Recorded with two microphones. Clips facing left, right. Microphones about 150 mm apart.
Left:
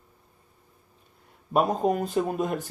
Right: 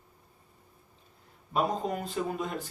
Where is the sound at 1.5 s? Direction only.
55° left (ahead or behind).